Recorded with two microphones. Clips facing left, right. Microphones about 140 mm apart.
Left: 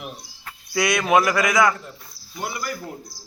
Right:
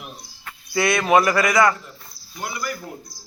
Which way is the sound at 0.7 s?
Centre (ahead or behind).